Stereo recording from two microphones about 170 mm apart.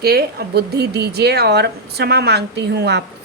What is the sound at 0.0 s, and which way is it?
A woman's voice, 65° right (ahead or behind).